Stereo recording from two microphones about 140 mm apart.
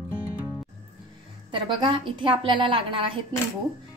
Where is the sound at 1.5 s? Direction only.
35° right (ahead or behind).